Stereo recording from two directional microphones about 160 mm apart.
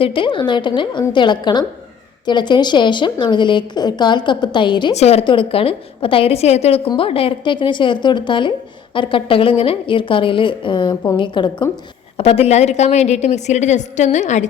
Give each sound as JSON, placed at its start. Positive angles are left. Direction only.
{"t": 0.0, "sound": "a woman's voice", "side_deg": 30}
{"t": 4.9, "sound": "a woman's voice", "side_deg": 40}